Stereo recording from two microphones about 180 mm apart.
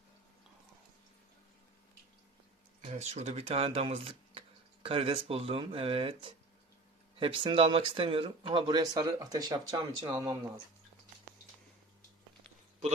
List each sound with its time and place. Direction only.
2.8 s speech: 40° right (ahead or behind); by 10.3 s 20° right (ahead or behind)